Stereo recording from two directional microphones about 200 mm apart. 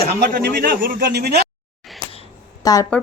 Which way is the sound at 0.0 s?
50° right (ahead or behind).